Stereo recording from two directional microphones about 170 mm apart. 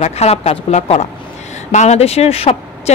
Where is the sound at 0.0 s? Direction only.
40° left (ahead or behind).